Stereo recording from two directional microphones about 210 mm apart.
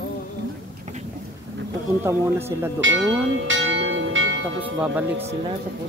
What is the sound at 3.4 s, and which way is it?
Church bell, 65° right (ahead or behind).